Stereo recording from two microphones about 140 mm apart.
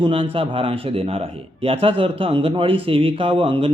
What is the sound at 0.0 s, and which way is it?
A man's voice, 40° right (ahead or behind).